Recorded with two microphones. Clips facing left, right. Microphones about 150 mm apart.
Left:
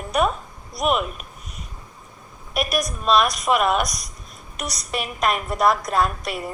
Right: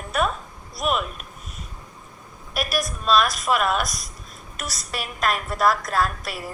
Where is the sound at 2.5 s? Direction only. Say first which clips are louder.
Left 2 dB; centre (ahead or behind).